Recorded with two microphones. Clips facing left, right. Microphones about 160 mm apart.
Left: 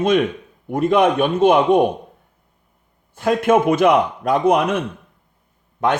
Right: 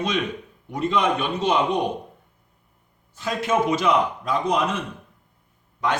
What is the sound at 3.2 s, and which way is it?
Speech, 55° left (ahead or behind).